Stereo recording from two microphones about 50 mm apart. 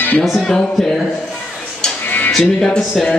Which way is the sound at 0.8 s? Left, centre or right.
Centre.